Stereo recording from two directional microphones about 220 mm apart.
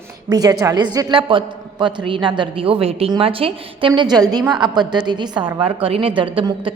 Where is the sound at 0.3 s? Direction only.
15° right (ahead or behind).